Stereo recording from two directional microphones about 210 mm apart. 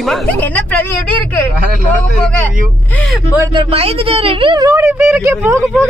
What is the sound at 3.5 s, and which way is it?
A woman's voice, 25° right (ahead or behind).